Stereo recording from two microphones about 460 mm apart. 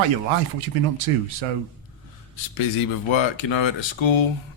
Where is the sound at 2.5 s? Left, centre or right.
Left.